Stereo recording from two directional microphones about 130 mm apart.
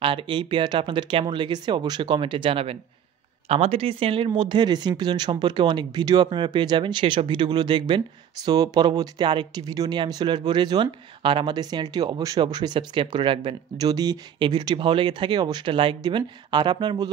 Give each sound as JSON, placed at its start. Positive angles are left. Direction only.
{"t": 0.0, "sound": "speech", "side_deg": -40}